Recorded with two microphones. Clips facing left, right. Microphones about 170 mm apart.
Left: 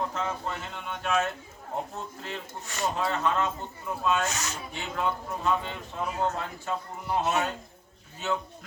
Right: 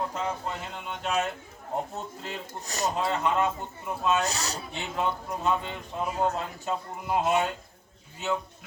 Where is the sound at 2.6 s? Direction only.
40° right (ahead or behind).